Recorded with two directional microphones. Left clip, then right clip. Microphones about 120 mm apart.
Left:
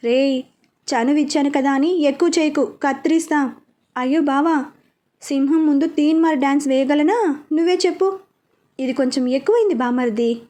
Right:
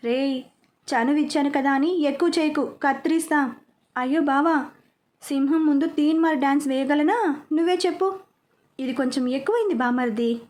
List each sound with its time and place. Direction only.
0.0 s a woman's voice: 25° left (ahead or behind)